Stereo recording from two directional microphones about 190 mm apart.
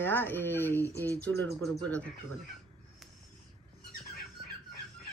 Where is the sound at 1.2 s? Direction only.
10° left (ahead or behind).